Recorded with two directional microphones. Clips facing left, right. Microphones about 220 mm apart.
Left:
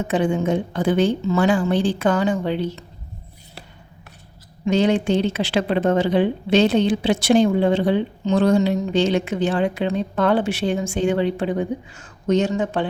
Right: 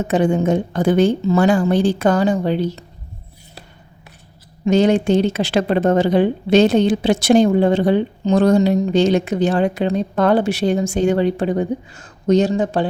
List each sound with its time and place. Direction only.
0.1 s a woman's voice: 45° right (ahead or behind)
4.6 s a woman's voice: 45° right (ahead or behind)